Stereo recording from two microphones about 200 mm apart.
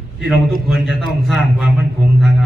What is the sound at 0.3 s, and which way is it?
A man's voice, centre (ahead or behind).